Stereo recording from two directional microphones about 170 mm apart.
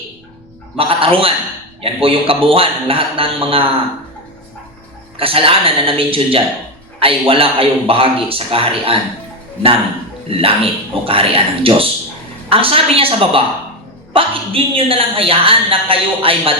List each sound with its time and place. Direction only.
0.8 s a woman's voice: 35° right (ahead or behind)
5.1 s a woman's voice: 35° right (ahead or behind)
10.2 s a woman's voice: 35° right (ahead or behind)